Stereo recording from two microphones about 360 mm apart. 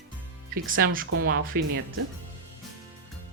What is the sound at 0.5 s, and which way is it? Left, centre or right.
Speech, right.